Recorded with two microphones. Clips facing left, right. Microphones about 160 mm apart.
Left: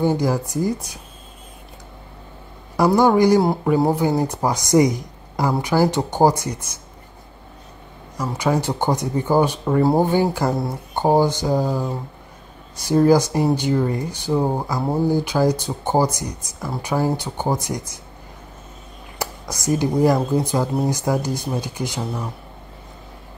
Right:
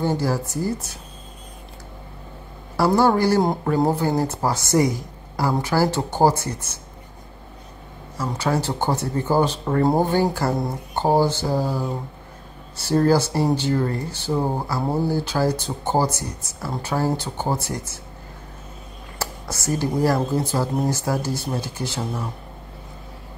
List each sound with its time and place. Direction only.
0.0 s speech: 15° left (ahead or behind)
2.8 s speech: 15° left (ahead or behind)
8.2 s speech: 15° left (ahead or behind)
19.1 s speech: 15° left (ahead or behind)